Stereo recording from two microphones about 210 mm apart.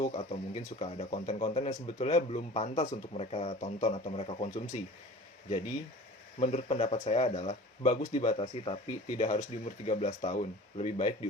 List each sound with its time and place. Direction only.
0.0 s speech: 35° left (ahead or behind)
6.4 s speech: 30° left (ahead or behind)